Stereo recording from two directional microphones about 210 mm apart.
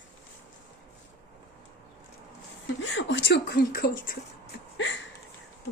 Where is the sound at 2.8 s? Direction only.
60° left (ahead or behind).